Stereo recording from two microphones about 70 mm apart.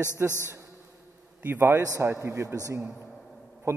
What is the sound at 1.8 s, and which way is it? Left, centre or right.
Speech, right.